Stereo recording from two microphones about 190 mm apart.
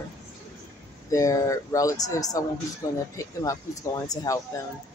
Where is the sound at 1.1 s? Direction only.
15° left (ahead or behind).